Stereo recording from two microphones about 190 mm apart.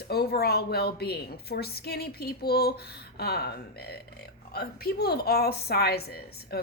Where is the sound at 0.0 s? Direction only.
55° left (ahead or behind).